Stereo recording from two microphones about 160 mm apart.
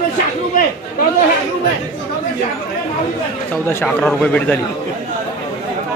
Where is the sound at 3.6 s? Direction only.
5° left (ahead or behind).